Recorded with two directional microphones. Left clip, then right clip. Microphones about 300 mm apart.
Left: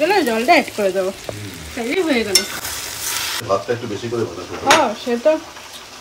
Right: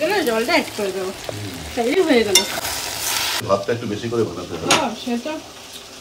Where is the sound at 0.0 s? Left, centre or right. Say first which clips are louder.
Left 3 dB; centre.